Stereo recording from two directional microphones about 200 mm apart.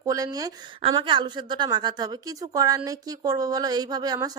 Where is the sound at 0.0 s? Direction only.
15° right (ahead or behind).